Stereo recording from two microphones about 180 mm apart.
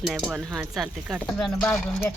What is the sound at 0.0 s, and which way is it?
Speech, centre (ahead or behind).